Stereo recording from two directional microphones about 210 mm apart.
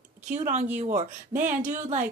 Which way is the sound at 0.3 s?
35° right (ahead or behind).